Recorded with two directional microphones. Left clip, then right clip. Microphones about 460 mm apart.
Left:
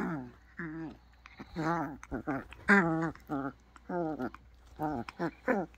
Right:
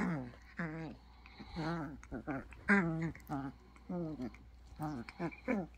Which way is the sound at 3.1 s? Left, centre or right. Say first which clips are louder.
Left 6 dB; centre.